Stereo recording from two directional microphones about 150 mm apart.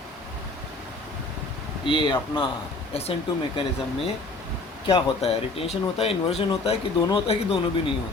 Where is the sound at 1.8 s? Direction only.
35° left (ahead or behind).